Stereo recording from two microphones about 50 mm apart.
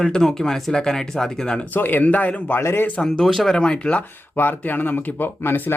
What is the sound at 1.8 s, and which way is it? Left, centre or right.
Speech, left.